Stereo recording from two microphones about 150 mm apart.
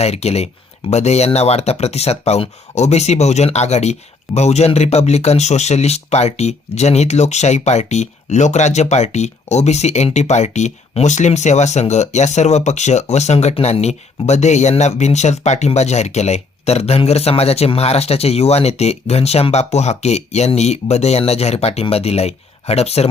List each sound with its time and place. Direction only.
0.0 s speech: 45° left (ahead or behind)